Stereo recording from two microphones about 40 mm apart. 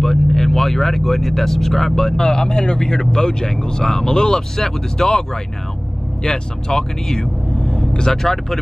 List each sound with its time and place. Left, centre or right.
0.0 s speech: centre